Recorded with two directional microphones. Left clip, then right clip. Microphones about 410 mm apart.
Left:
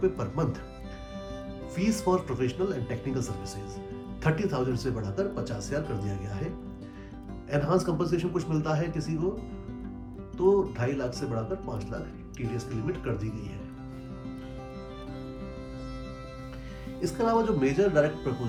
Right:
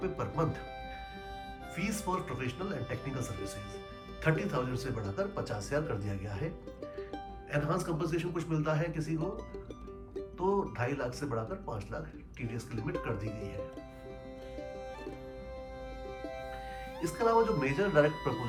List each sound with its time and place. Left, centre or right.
0.0 s speech: centre
1.7 s speech: centre
7.5 s speech: centre
10.3 s speech: centre
17.0 s speech: centre